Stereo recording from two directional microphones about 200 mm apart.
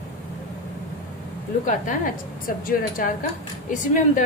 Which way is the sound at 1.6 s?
40° left (ahead or behind).